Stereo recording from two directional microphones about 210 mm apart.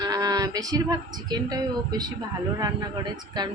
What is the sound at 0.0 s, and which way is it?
Speech, 20° right (ahead or behind).